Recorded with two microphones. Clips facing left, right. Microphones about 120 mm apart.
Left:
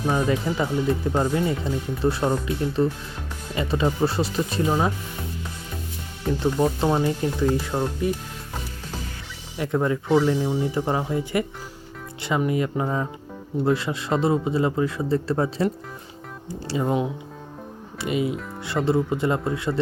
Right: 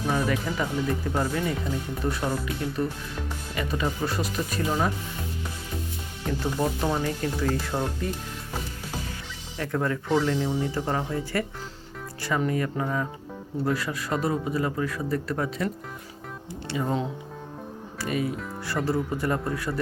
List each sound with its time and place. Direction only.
0.0 s speech: 20° left (ahead or behind)
6.4 s speech: 20° left (ahead or behind)
9.6 s speech: 15° left (ahead or behind)
16.7 s speech: 20° left (ahead or behind)